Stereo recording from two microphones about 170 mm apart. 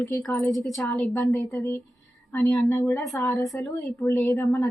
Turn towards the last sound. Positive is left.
turn(degrees=15)  # may be behind; listen again after turning